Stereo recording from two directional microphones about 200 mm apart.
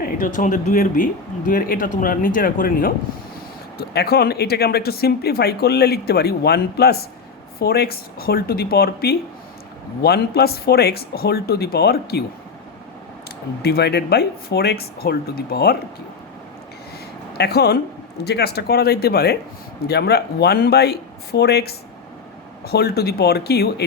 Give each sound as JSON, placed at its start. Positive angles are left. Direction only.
{"t": 0.0, "sound": "speech", "side_deg": 40}
{"t": 13.6, "sound": "speech", "side_deg": 55}
{"t": 17.3, "sound": "a woman's voice", "side_deg": 55}